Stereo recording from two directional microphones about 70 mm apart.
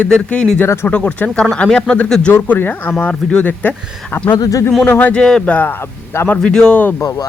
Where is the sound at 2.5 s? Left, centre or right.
Left.